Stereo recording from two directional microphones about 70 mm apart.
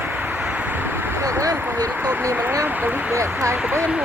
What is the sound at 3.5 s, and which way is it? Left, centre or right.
Speech, right.